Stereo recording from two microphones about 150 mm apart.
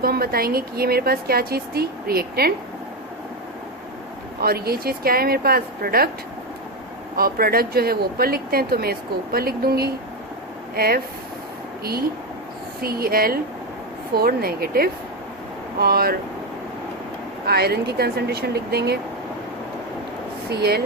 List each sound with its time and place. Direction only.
0.0 s speech: 90° right
4.4 s speech: 90° right
7.2 s speech: 85° right
17.4 s speech: 90° right
20.5 s speech: 90° right